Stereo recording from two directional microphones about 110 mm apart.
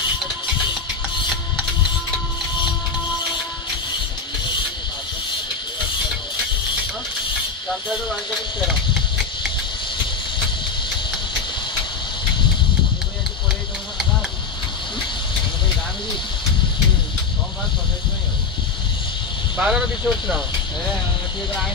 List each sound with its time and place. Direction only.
19.5 s speech: 10° right (ahead or behind)